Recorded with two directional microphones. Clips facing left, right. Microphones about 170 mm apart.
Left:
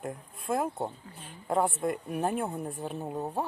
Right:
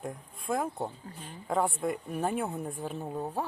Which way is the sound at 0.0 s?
5° left (ahead or behind).